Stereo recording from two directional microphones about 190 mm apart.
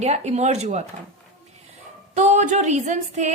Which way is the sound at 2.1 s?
40° right (ahead or behind).